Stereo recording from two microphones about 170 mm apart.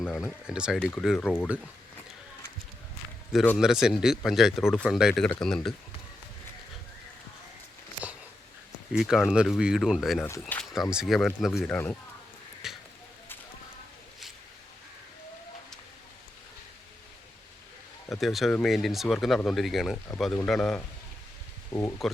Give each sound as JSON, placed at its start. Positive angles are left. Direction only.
{"t": 0.0, "sound": "speech", "side_deg": 5}
{"t": 0.8, "sound": "speech", "side_deg": 5}
{"t": 3.6, "sound": "speech", "side_deg": -5}
{"t": 8.9, "sound": "speech", "side_deg": -5}
{"t": 12.6, "sound": "a sound", "side_deg": 0}
{"t": 18.1, "sound": "speech", "side_deg": 0}
{"t": 21.7, "sound": "speech", "side_deg": 15}